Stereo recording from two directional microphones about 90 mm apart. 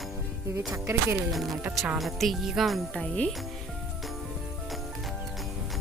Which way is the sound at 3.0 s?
10° left (ahead or behind).